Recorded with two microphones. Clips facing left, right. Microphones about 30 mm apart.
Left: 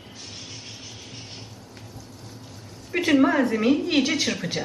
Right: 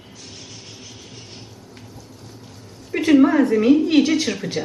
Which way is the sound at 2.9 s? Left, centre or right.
Centre.